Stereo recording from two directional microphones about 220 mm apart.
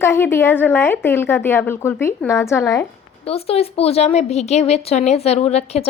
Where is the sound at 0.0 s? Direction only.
10° left (ahead or behind).